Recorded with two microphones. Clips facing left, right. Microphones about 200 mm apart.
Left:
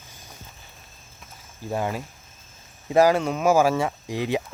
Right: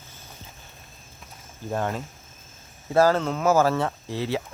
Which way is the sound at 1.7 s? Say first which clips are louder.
Left 1 dB; 10° left (ahead or behind).